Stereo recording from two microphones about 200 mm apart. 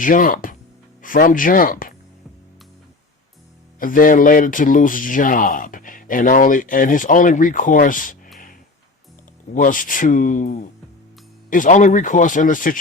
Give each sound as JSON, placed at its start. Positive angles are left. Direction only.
{"t": 0.0, "sound": "speech", "side_deg": 45}
{"t": 3.8, "sound": "speech", "side_deg": 45}
{"t": 9.5, "sound": "speech", "side_deg": 40}